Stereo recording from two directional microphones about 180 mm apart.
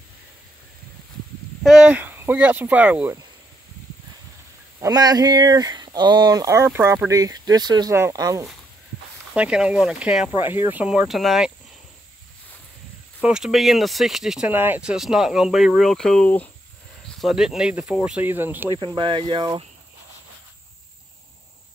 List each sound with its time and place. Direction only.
1.6 s speech: centre (ahead or behind)
4.7 s speech: 20° right (ahead or behind)
9.3 s speech: 5° right (ahead or behind)
13.2 s speech: 5° right (ahead or behind)
18.9 s speech: 25° right (ahead or behind)